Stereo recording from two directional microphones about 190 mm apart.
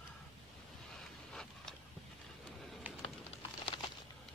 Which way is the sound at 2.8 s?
10° right (ahead or behind).